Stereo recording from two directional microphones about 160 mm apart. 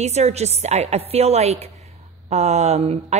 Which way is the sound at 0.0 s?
45° right (ahead or behind).